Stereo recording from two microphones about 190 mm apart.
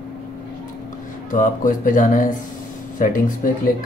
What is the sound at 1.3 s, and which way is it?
Speech, 45° left (ahead or behind).